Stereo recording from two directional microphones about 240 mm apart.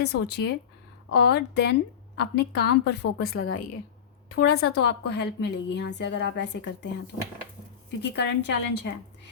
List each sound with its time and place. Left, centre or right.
0.0 s a woman's voice: left
3.0 s speech: left
4.4 s a woman's voice: left